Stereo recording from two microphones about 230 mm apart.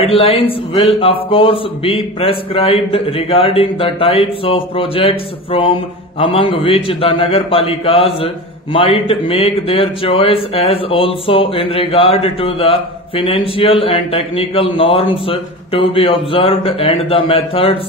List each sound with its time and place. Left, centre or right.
0.0 s a man's voice: left